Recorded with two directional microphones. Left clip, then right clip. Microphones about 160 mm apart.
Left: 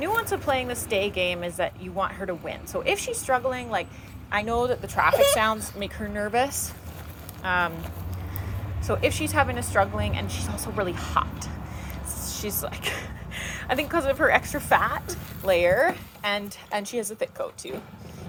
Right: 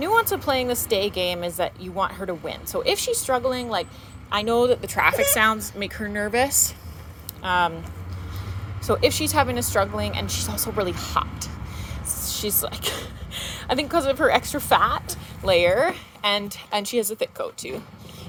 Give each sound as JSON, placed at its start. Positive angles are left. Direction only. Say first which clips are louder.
{"t": 0.0, "sound": "a woman's voice", "louder": "right 5 dB", "side_deg": -50}
{"t": 8.9, "sound": "a woman's voice", "louder": "right 4 dB", "side_deg": -45}
{"t": 12.6, "sound": "a woman's voice", "louder": "right 2 dB", "side_deg": -50}